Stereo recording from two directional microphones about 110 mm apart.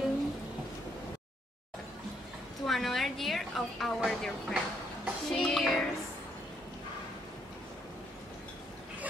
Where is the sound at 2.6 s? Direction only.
Centre (ahead or behind).